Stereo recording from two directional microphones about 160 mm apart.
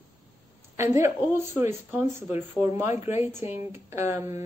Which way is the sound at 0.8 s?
15° right (ahead or behind).